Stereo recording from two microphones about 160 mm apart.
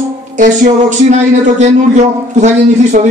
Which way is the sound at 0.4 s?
50° right (ahead or behind).